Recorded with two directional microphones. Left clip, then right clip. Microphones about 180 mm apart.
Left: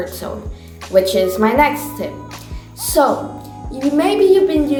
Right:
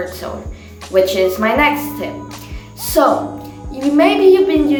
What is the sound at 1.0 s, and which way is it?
A child's voice, 50° left (ahead or behind).